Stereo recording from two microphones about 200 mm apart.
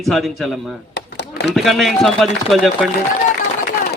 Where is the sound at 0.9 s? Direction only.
55° left (ahead or behind).